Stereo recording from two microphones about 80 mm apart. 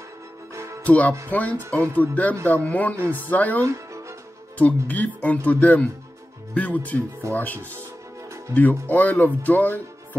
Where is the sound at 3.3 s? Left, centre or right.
Left.